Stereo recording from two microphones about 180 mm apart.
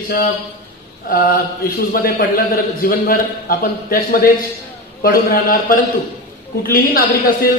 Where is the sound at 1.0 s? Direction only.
55° left (ahead or behind).